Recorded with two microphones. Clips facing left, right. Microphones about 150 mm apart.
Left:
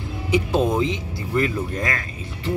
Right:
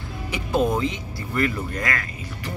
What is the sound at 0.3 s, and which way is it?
Speech, 20° left (ahead or behind).